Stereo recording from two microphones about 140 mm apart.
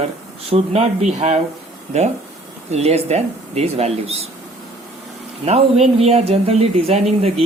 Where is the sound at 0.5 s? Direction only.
50° right (ahead or behind).